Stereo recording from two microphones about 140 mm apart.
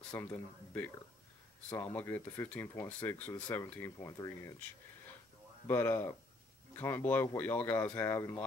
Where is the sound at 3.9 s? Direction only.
25° left (ahead or behind).